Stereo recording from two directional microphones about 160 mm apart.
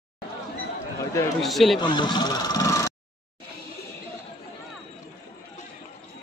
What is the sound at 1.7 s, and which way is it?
Speech, 30° left (ahead or behind).